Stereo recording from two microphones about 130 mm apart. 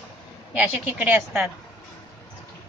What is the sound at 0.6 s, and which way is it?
Speech, 15° right (ahead or behind).